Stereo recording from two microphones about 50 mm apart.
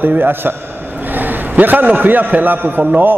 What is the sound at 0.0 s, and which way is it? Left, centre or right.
A man's voice, right.